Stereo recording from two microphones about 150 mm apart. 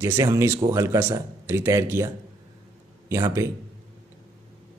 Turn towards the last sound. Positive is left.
turn(degrees=-20)  # may be behind; listen again after turning